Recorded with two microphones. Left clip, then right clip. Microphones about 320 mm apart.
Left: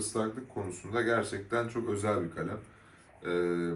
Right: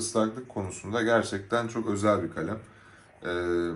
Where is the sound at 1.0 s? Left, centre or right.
Centre.